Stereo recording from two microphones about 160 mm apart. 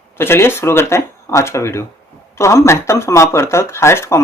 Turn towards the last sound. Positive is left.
turn(degrees=15)  # may be behind; listen again after turning